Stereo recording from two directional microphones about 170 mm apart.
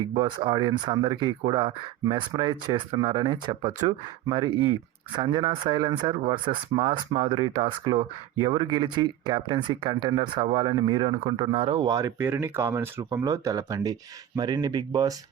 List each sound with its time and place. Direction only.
0.2 s speech: 30° right (ahead or behind)
3.7 s speech: 45° right (ahead or behind)
5.1 s speech: 25° right (ahead or behind)